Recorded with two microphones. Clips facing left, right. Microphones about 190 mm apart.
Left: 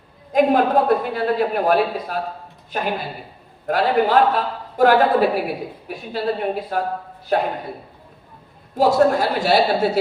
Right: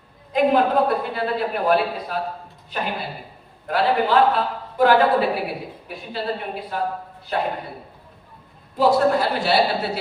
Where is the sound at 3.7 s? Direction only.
45° left (ahead or behind).